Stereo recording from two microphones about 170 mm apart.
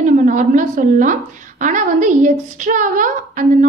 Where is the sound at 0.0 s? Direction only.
50° right (ahead or behind).